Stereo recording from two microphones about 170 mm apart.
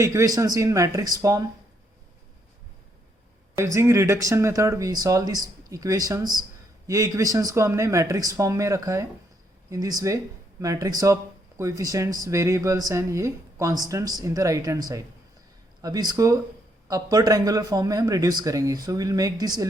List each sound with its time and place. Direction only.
0.0 s speech: 20° right (ahead or behind)
3.6 s speech: 15° right (ahead or behind)